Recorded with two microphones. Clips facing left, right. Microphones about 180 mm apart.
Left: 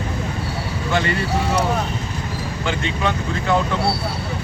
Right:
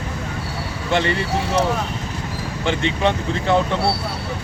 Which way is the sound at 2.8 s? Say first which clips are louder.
Right 3 dB; 25° right (ahead or behind).